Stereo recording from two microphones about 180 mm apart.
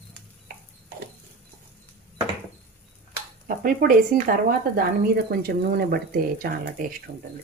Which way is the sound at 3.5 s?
50° right (ahead or behind).